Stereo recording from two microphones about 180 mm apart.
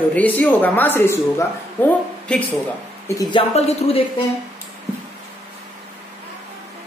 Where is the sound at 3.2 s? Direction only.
25° left (ahead or behind).